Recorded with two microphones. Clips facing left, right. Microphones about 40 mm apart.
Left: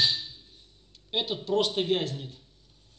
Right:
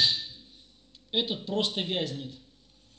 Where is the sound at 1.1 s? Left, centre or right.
Centre.